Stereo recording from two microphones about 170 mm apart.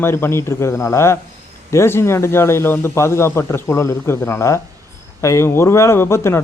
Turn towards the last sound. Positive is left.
turn(degrees=15)  # may be behind; listen again after turning